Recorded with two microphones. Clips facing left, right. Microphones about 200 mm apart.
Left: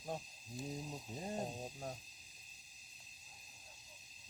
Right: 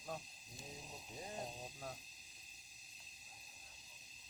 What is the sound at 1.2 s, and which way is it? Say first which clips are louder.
Speech: left 6 dB; 35° left (ahead or behind).